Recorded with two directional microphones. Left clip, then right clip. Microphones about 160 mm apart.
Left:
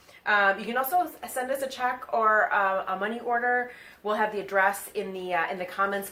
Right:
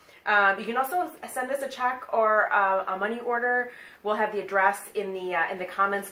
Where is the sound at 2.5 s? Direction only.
30° left (ahead or behind).